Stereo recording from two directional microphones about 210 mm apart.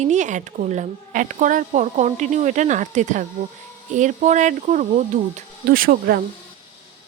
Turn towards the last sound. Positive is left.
turn(degrees=-45)  # may be behind; listen again after turning